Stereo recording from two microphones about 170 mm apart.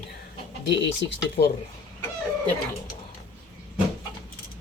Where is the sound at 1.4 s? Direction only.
85° left.